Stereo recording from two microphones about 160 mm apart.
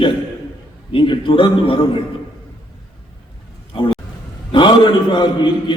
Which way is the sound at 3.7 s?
35° left (ahead or behind).